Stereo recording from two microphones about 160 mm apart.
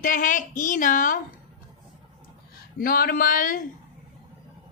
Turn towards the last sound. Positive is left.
turn(degrees=60)  # may be behind; listen again after turning